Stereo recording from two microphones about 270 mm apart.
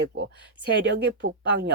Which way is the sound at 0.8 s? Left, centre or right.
Right.